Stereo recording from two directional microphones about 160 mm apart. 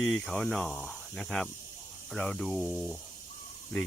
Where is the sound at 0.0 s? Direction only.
Centre (ahead or behind).